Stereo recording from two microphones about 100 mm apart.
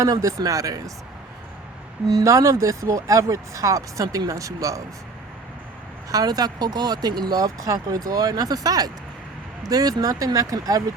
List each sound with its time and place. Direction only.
0.0 s speech: 30° right (ahead or behind)
2.0 s speech: 35° right (ahead or behind)
6.1 s speech: 40° right (ahead or behind)